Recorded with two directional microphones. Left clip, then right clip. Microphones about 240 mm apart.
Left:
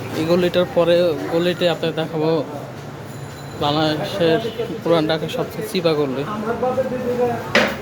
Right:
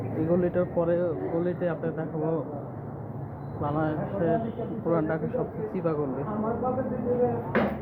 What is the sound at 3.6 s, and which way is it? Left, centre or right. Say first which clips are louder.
Speech: left 10 dB; left.